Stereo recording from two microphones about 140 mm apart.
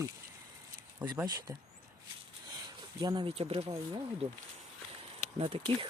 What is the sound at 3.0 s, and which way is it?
Speech, 30° right (ahead or behind).